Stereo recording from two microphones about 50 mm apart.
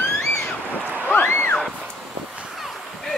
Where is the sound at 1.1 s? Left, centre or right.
Left.